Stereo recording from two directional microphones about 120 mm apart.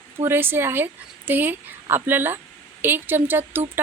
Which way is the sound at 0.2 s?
20° right (ahead or behind).